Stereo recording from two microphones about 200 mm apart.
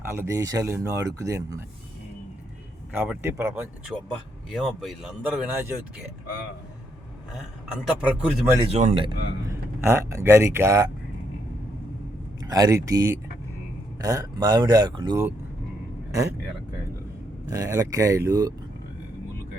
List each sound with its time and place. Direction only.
0.0 s speech: 10° right (ahead or behind)
2.9 s speech: 10° right (ahead or behind)
4.5 s speech: centre (ahead or behind)
7.3 s speech: 5° right (ahead or behind)
8.7 s a man's voice: 30° right (ahead or behind)
9.5 s speech: 15° right (ahead or behind)
12.4 s speech: 20° right (ahead or behind)
17.5 s speech: 15° right (ahead or behind)